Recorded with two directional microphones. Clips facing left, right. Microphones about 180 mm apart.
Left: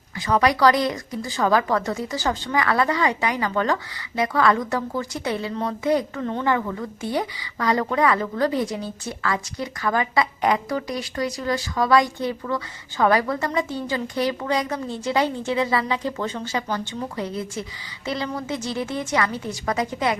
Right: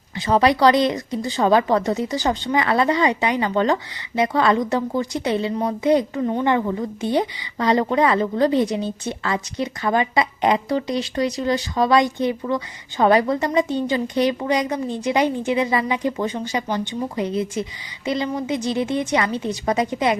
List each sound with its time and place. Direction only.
0.2 s a woman's voice: 25° right (ahead or behind)